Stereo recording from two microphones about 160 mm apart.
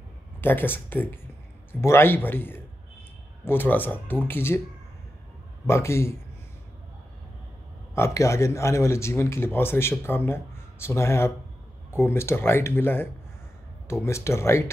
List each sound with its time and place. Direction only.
0.4 s speech: 15° left (ahead or behind)
5.7 s speech: 15° left (ahead or behind)
7.9 s speech: 15° left (ahead or behind)